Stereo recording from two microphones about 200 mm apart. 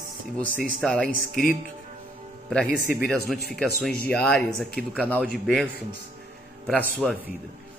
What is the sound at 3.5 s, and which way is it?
Speech, 5° left (ahead or behind).